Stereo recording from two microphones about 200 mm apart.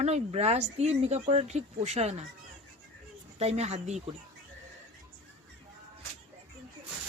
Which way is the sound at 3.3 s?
35° right (ahead or behind).